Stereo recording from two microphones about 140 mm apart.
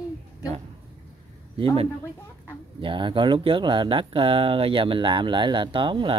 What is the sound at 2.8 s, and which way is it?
Speech, 35° right (ahead or behind).